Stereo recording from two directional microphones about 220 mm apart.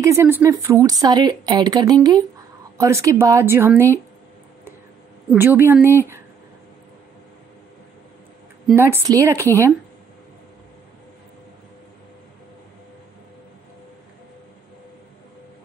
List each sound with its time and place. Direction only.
0.0 s speech: 10° right (ahead or behind)
5.3 s speech: 10° right (ahead or behind)
8.7 s speech: 10° right (ahead or behind)